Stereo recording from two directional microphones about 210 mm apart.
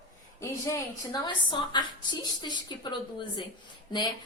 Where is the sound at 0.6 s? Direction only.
15° left (ahead or behind).